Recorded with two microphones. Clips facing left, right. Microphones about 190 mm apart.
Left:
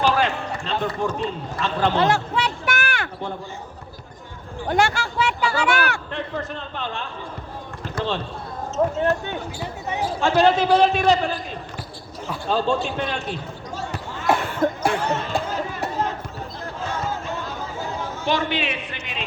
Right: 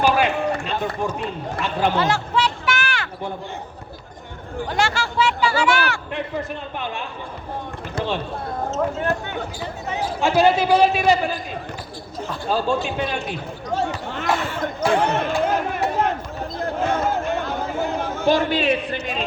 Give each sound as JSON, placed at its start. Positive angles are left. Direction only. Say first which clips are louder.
{"t": 0.0, "sound": "run", "louder": "right 2 dB", "side_deg": -10}
{"t": 1.6, "sound": "a man's voice", "louder": "even", "side_deg": -10}
{"t": 2.0, "sound": "a sound", "louder": "even", "side_deg": 60}
{"t": 4.7, "sound": "speech", "louder": "left 2 dB", "side_deg": 55}
{"t": 6.1, "sound": "a man's voice", "louder": "right 2 dB", "side_deg": -10}
{"t": 10.2, "sound": "a man's voice", "louder": "right 1 dB", "side_deg": -10}
{"t": 12.5, "sound": "a man's voice", "louder": "even", "side_deg": -5}
{"t": 13.7, "sound": "basketball bounce", "louder": "right 9 dB", "side_deg": -60}
{"t": 14.3, "sound": "a sound", "louder": "left 2 dB", "side_deg": 55}
{"t": 14.8, "sound": "a sound", "louder": "right 3 dB", "side_deg": -60}
{"t": 16.6, "sound": "chatter", "louder": "right 8 dB", "side_deg": -55}
{"t": 18.3, "sound": "a man's voice", "louder": "right 6 dB", "side_deg": -35}